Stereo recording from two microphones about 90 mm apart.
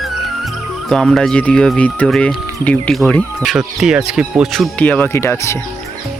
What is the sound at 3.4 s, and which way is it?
Speech, 5° right (ahead or behind).